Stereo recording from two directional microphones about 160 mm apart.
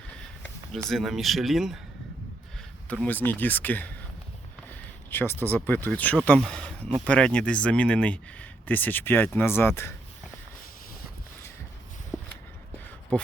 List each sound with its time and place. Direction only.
0.9 s speech: centre (ahead or behind)
2.9 s speech: 10° left (ahead or behind)
5.1 s speech: 15° left (ahead or behind)
12.1 s walk: 10° right (ahead or behind)
13.1 s speech: 10° left (ahead or behind)